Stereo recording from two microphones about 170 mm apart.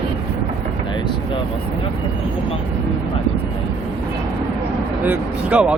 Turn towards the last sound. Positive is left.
turn(degrees=-5)  # may be behind; listen again after turning